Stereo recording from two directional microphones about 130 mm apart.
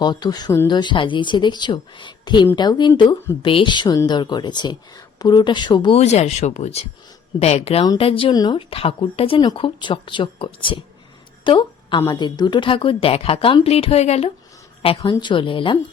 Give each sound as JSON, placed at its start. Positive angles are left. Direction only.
{"t": 0.0, "sound": "speech", "side_deg": 35}
{"t": 6.0, "sound": "a woman's voice", "side_deg": 55}